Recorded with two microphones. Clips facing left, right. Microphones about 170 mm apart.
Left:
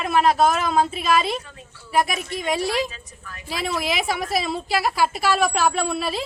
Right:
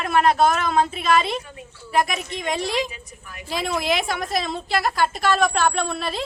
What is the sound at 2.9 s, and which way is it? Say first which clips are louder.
Speech: right 1 dB; 15° right (ahead or behind).